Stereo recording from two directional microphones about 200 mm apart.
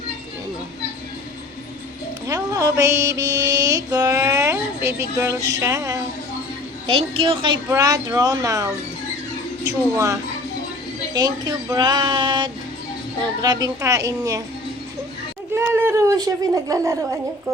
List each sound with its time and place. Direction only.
2.2 s music: 15° right (ahead or behind)
3.9 s speech: 15° right (ahead or behind)
6.8 s a woman's voice: 25° right (ahead or behind)
15.5 s a child's voice: 10° right (ahead or behind)